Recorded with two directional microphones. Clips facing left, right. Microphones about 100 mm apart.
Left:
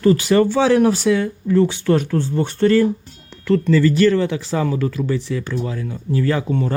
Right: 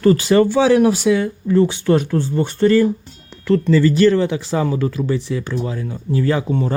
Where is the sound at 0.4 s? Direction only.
10° right (ahead or behind).